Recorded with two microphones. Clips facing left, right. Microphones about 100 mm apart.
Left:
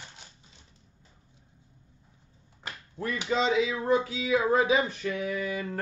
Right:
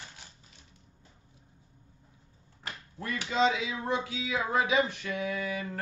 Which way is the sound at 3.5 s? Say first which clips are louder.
Left 7 dB; 30° left (ahead or behind).